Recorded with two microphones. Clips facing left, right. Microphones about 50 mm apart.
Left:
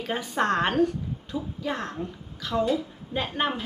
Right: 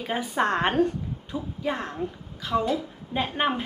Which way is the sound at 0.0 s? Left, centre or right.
Centre.